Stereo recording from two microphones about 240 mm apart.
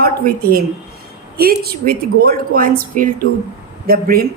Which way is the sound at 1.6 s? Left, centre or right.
Right.